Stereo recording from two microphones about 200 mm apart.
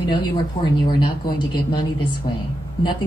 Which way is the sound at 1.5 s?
25° left (ahead or behind).